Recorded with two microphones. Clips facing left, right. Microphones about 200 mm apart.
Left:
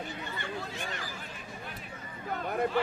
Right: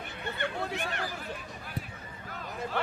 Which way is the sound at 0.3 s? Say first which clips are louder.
Right 4 dB; 65° right (ahead or behind).